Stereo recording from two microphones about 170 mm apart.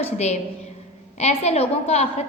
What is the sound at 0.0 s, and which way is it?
A woman's voice, 40° left (ahead or behind).